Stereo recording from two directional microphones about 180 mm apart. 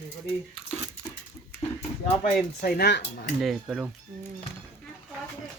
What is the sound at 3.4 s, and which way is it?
Speech, centre (ahead or behind).